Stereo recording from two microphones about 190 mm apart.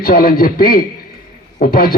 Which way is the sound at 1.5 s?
50° left (ahead or behind).